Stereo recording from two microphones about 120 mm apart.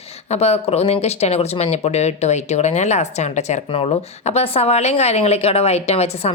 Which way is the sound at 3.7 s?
55° left (ahead or behind).